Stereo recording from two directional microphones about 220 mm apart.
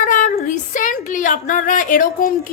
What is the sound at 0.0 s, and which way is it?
A woman's voice, 35° left (ahead or behind).